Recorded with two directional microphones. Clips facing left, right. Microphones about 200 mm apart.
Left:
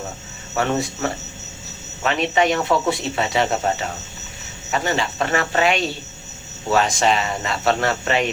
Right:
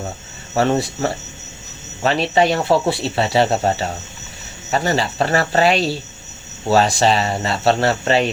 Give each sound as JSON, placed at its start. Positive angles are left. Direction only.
{"t": 0.5, "sound": "speech", "side_deg": -35}